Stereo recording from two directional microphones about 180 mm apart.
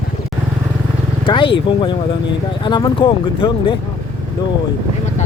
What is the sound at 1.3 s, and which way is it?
Speech, 30° left (ahead or behind).